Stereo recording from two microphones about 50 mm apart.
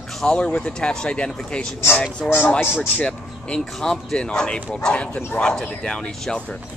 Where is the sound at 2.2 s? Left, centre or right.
Centre.